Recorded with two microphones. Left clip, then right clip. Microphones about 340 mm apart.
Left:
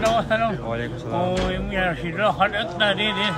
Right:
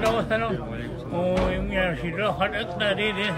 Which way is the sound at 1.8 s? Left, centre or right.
Centre.